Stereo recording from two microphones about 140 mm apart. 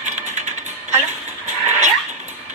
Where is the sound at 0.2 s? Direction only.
55° right (ahead or behind).